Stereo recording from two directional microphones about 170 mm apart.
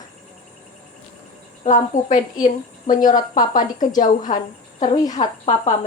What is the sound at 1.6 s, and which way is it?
A woman's voice, 45° left (ahead or behind).